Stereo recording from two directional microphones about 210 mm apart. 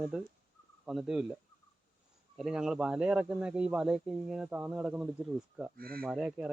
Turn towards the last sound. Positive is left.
turn(degrees=-5)  # may be behind; listen again after turning